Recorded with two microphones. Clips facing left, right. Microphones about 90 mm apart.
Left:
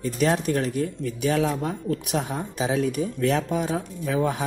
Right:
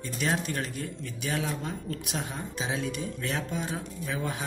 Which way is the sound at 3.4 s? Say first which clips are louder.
Left 8 dB; 65° left (ahead or behind).